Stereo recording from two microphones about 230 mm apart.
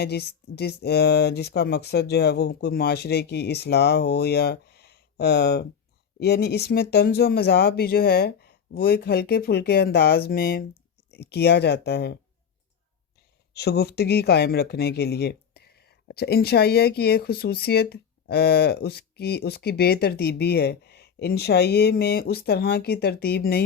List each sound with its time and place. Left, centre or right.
0.0 s speech: left
13.5 s speech: left